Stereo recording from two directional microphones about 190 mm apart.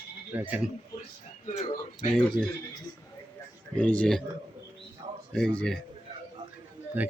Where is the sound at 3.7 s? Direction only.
5° left (ahead or behind).